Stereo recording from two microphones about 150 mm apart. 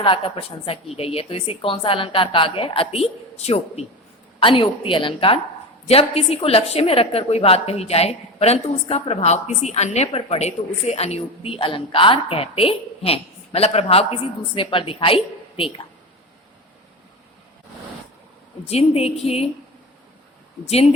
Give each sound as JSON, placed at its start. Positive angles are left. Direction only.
{"t": 0.0, "sound": "a woman's voice", "side_deg": 35}
{"t": 18.7, "sound": "a woman's voice", "side_deg": 45}